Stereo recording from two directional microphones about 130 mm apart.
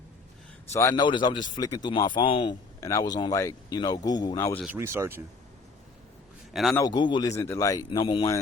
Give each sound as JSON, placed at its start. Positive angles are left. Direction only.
{"t": 0.7, "sound": "speech", "side_deg": 20}
{"t": 0.9, "sound": "speech", "side_deg": 35}
{"t": 2.8, "sound": "speech", "side_deg": 30}
{"t": 4.7, "sound": "speech", "side_deg": -20}
{"t": 6.5, "sound": "a man's voice", "side_deg": 0}
{"t": 6.8, "sound": "speech", "side_deg": 35}
{"t": 7.3, "sound": "speech", "side_deg": 25}
{"t": 7.9, "sound": "speech", "side_deg": 40}